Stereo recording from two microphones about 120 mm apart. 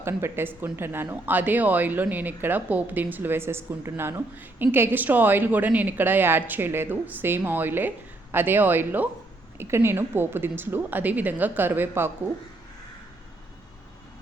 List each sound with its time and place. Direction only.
0.0 s speech: 20° right (ahead or behind)